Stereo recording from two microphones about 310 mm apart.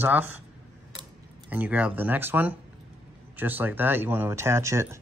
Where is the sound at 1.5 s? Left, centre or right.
Centre.